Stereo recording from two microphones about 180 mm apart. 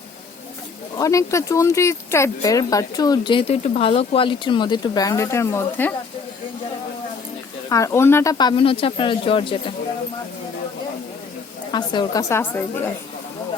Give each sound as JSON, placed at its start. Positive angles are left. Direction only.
{"t": 0.9, "sound": "speech", "side_deg": 15}
{"t": 7.7, "sound": "speech", "side_deg": 15}
{"t": 11.7, "sound": "speech", "side_deg": 25}
{"t": 12.3, "sound": "a woman's voice", "side_deg": 10}